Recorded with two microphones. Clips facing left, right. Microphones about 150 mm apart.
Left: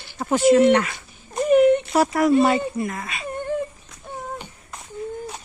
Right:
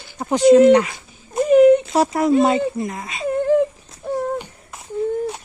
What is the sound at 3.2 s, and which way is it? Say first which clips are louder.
Dog: right 10 dB; 90° right.